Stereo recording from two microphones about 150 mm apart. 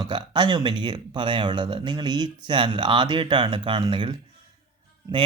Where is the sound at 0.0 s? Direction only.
30° right (ahead or behind).